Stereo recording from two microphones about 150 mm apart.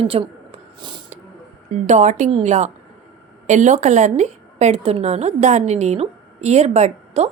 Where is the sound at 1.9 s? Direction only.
50° right (ahead or behind).